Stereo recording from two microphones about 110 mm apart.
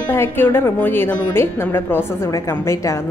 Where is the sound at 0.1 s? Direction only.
20° left (ahead or behind).